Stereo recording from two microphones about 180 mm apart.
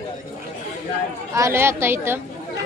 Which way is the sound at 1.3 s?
15° right (ahead or behind).